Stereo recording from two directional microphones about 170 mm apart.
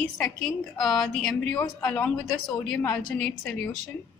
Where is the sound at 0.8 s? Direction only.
5° left (ahead or behind).